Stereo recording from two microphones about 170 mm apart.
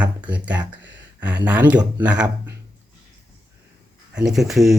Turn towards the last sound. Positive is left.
turn(degrees=0)  # may be behind; listen again after turning